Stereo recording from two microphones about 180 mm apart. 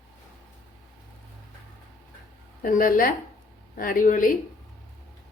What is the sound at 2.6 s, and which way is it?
Speech, 50° left (ahead or behind).